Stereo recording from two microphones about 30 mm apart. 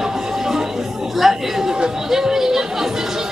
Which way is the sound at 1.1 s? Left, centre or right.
Centre.